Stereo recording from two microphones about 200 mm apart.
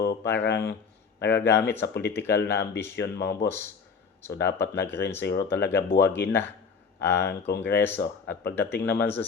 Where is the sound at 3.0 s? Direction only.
55° left (ahead or behind).